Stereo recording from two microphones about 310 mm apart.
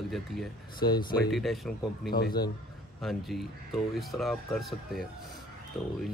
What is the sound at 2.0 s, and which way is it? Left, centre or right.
Speech, left.